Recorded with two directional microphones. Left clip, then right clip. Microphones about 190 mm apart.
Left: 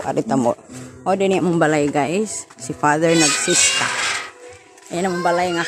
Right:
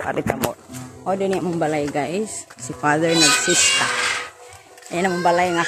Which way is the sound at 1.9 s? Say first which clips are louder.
Left 4 dB; 45° left (ahead or behind).